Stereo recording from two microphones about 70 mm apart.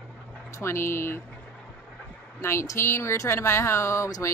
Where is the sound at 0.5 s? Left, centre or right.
Left.